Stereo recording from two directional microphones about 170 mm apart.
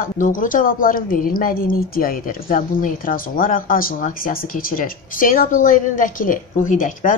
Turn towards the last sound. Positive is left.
turn(degrees=50)  # may be behind; listen again after turning